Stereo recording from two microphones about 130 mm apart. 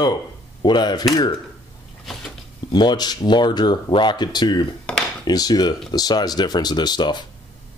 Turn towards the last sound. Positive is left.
turn(degrees=35)  # may be behind; listen again after turning